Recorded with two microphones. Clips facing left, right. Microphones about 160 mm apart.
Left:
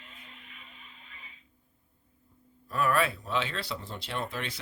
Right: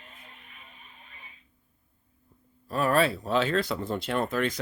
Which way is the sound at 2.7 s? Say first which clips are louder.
Right 3 dB; 30° right (ahead or behind).